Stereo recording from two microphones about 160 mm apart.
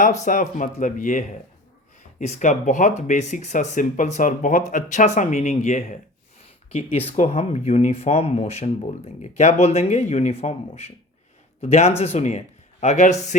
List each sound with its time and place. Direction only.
0.2 s speech: 55° left (ahead or behind)